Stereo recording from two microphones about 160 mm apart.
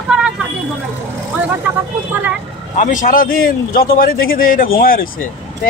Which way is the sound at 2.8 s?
55° left (ahead or behind).